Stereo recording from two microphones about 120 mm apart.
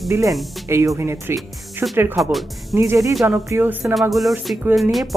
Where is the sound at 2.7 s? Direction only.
25° right (ahead or behind).